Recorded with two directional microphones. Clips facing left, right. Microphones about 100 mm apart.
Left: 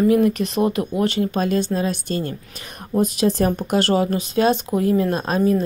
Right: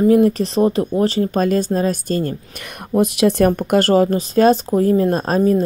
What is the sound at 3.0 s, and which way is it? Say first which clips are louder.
Speech: right 4 dB; 65° right (ahead or behind).